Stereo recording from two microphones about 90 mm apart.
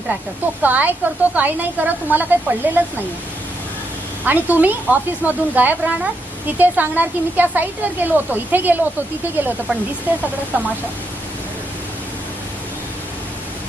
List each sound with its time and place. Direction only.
0.6 s a woman's voice: 20° right (ahead or behind)
4.2 s a woman's voice: 20° right (ahead or behind)
10.1 s a woman's voice: 20° right (ahead or behind)